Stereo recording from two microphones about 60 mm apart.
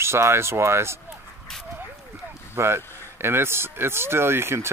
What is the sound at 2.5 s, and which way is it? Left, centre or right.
Speech, right.